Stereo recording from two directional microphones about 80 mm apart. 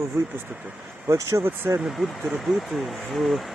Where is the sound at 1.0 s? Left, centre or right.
Right.